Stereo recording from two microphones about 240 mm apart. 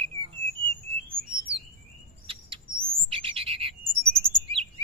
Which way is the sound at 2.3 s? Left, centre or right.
Right.